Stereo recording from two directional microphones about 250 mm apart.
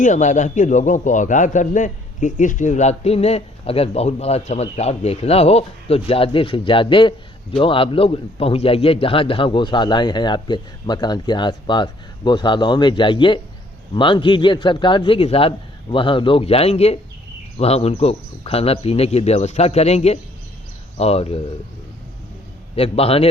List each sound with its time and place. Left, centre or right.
0.0 s a man's voice: left
22.7 s a man's voice: left